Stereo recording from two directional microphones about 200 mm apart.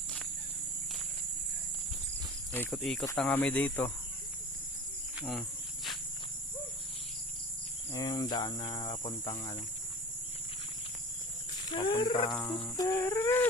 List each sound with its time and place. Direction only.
2.5 s speech: 5° left (ahead or behind)
3.2 s a sound: 5° left (ahead or behind)
5.2 s insect: centre (ahead or behind)
7.9 s cricket: 20° left (ahead or behind)
11.6 s cricket: 25° left (ahead or behind)
12.6 s a sound: 15° left (ahead or behind)